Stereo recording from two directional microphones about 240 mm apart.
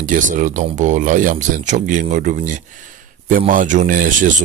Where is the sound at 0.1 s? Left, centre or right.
Right.